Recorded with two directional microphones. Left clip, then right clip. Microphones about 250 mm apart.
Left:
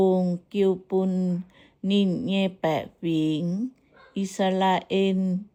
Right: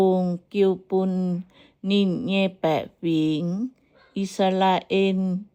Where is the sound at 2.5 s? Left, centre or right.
Right.